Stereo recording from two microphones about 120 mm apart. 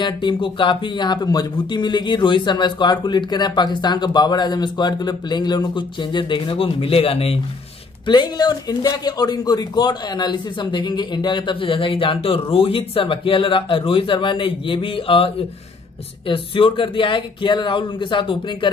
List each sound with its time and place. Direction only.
0.0 s speech: 40° left (ahead or behind)
8.1 s speech: 35° left (ahead or behind)